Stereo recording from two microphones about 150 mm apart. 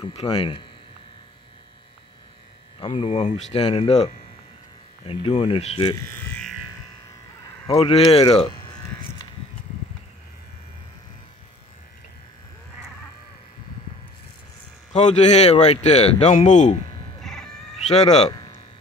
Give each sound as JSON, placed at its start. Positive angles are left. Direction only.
{"t": 0.0, "sound": "speech", "side_deg": 35}
{"t": 2.8, "sound": "speech", "side_deg": 35}
{"t": 3.5, "sound": "speech", "side_deg": 35}
{"t": 7.7, "sound": "speech", "side_deg": 45}
{"t": 14.9, "sound": "speech", "side_deg": 50}
{"t": 17.2, "sound": "a sound", "side_deg": 5}